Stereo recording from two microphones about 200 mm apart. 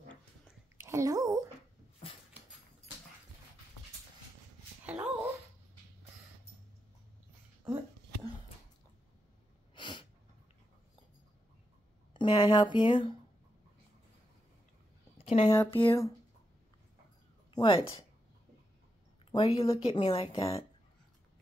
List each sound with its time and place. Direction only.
0.7 s a woman's voice: 15° right (ahead or behind)
4.8 s a sound: 5° right (ahead or behind)
9.8 s sneeze: 25° left (ahead or behind)
12.1 s speech: 25° left (ahead or behind)
15.1 s a sound: 30° left (ahead or behind)
15.4 s speech: 10° left (ahead or behind)
15.8 s speech: 25° left (ahead or behind)
17.6 s speech: 25° left (ahead or behind)
19.3 s speech: 25° left (ahead or behind)